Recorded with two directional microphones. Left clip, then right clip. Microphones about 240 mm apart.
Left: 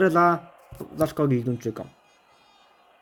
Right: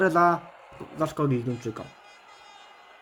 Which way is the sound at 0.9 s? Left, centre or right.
Centre.